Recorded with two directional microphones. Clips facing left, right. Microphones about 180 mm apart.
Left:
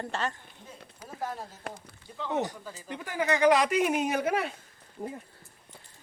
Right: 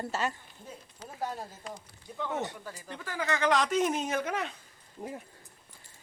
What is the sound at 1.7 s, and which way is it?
Speech, 65° left (ahead or behind).